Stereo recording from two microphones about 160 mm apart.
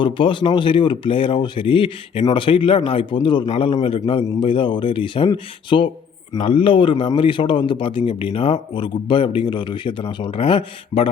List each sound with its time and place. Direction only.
0.0 s a man's voice: 30° left (ahead or behind)